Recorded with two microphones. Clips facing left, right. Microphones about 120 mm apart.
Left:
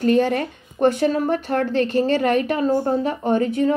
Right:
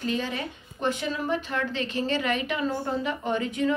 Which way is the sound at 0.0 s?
55° left (ahead or behind).